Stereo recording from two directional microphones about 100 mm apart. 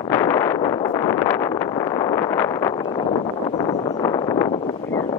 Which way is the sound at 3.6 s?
45° left (ahead or behind).